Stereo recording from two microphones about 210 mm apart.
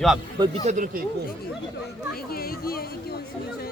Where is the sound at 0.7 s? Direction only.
40° right (ahead or behind).